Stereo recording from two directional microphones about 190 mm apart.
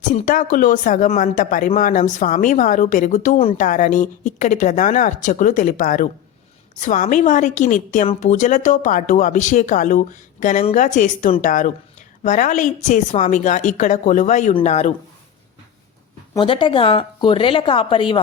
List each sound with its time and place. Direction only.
0.1 s a woman's voice: 40° left (ahead or behind)
16.3 s speech: 25° left (ahead or behind)